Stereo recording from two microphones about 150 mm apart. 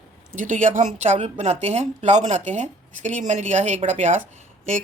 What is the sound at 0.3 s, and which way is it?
Speech, 55° right (ahead or behind).